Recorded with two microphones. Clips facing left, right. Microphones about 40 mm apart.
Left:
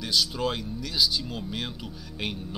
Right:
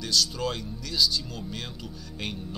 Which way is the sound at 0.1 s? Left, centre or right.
Centre.